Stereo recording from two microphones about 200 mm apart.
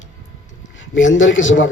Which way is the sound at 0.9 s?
70° left (ahead or behind).